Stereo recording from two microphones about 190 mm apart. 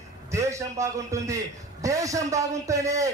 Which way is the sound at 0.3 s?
15° right (ahead or behind).